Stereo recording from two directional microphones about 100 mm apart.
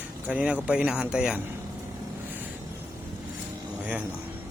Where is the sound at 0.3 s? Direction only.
15° right (ahead or behind).